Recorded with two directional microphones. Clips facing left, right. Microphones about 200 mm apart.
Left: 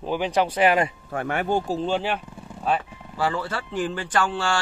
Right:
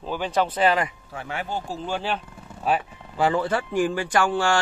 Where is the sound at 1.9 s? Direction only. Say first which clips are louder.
Left 3 dB; 20° left (ahead or behind).